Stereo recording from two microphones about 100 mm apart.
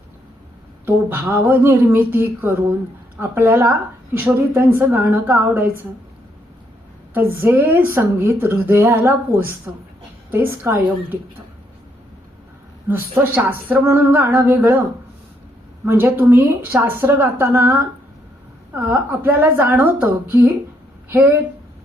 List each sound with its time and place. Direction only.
1.3 s a woman's voice: 20° right (ahead or behind)
7.1 s a woman's voice: 20° right (ahead or behind)
12.9 s a woman's voice: 20° right (ahead or behind)
15.9 s a woman's voice: 25° right (ahead or behind)